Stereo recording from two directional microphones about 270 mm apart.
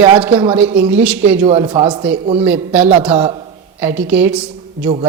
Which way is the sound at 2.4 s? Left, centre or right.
Centre.